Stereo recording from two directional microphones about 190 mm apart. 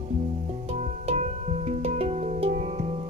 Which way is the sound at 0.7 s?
35° right (ahead or behind).